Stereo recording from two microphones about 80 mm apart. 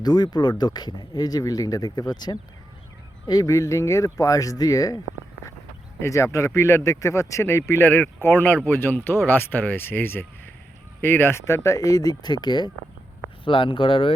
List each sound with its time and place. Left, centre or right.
0.0 s speech: left
3.4 s speech: left
6.0 s speech: left
13.4 s speech: left